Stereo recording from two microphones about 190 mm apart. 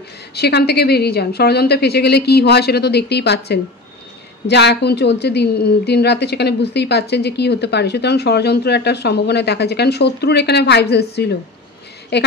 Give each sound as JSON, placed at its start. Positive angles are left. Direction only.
{"t": 0.3, "sound": "a woman's voice", "side_deg": 60}